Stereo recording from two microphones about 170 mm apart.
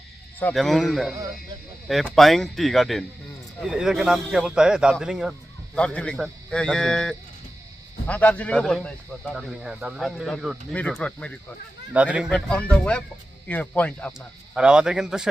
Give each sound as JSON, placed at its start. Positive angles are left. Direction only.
{"t": 0.5, "sound": "speech", "side_deg": 0}
{"t": 11.9, "sound": "speech", "side_deg": -5}
{"t": 12.3, "sound": "speech", "side_deg": 5}
{"t": 14.5, "sound": "speech", "side_deg": -5}